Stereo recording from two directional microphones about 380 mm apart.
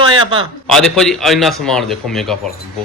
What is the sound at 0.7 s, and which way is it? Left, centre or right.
A man's voice, centre.